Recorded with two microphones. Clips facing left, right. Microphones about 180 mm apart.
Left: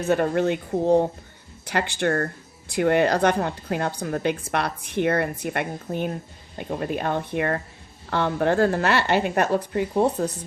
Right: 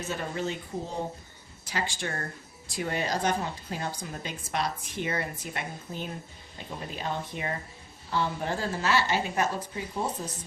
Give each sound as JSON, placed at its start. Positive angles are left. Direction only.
{"t": 0.0, "sound": "speech", "side_deg": 60}